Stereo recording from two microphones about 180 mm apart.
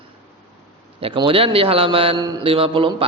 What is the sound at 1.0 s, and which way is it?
A man's voice, 30° right (ahead or behind).